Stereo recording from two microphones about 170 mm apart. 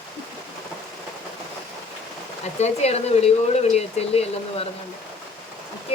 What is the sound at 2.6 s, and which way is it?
Speech, 40° left (ahead or behind).